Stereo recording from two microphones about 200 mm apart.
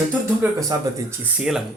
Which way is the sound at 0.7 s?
20° right (ahead or behind).